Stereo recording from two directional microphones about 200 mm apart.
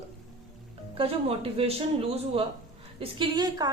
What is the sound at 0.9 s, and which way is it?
Speech, 30° right (ahead or behind).